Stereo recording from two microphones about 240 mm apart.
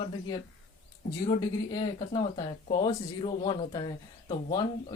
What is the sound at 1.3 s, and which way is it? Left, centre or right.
Speech, centre.